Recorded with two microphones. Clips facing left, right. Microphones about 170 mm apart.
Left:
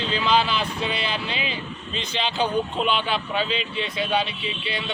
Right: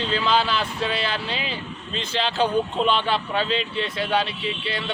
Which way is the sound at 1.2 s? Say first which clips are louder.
Even; 40° right (ahead or behind).